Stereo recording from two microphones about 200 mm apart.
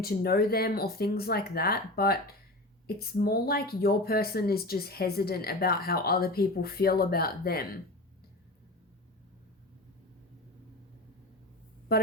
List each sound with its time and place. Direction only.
0.0 s a woman's voice: 50° left (ahead or behind)